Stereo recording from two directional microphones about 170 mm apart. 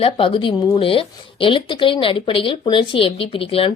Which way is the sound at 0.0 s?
30° left (ahead or behind).